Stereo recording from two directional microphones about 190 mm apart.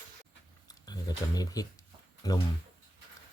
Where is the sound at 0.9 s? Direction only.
20° left (ahead or behind).